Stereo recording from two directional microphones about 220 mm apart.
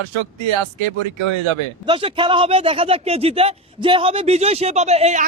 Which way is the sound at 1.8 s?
25° right (ahead or behind).